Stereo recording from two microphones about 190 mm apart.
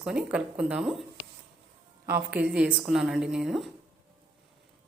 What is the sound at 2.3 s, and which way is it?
A woman's voice, 5° right (ahead or behind).